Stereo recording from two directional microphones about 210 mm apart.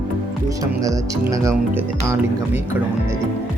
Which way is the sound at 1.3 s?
15° right (ahead or behind).